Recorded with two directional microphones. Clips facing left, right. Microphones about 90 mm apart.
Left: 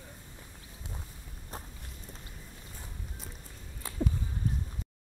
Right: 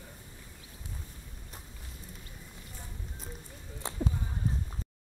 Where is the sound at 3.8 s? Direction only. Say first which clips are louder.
Right 4 dB; 25° right (ahead or behind).